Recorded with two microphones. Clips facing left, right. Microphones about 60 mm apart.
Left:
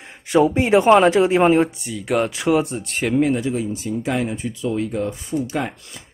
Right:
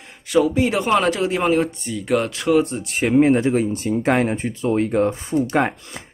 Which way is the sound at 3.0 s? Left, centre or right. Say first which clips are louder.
Right 3 dB; right.